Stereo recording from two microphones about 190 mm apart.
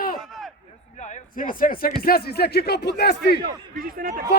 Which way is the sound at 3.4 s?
50° right (ahead or behind).